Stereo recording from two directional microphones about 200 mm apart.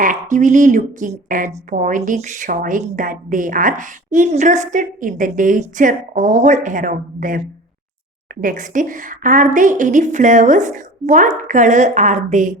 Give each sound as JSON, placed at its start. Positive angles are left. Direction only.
{"t": 0.0, "sound": "a woman's voice", "side_deg": -40}